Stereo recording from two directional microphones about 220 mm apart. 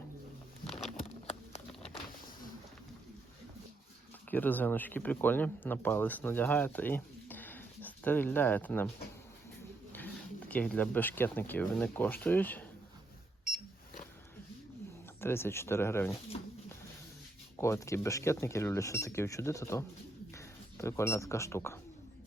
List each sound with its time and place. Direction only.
0.9 s a sound: 30° left (ahead or behind)
4.3 s speech: 10° left (ahead or behind)
10.5 s speech: 5° left (ahead or behind)
15.2 s speech: 10° left (ahead or behind)
17.6 s speech: 15° left (ahead or behind)